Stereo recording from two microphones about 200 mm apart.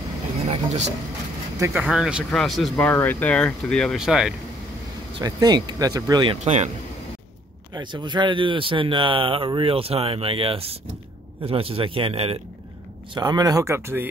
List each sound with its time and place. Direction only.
0.5 s speech: 35° right (ahead or behind)
1.6 s speech: 10° right (ahead or behind)
5.2 s speech: 20° right (ahead or behind)
6.4 s speech: 35° right (ahead or behind)
7.7 s speech: 20° right (ahead or behind)